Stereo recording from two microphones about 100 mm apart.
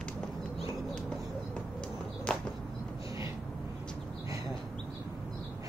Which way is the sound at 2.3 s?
10° left (ahead or behind).